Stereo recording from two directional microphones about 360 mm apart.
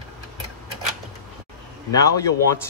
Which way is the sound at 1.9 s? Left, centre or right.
Centre.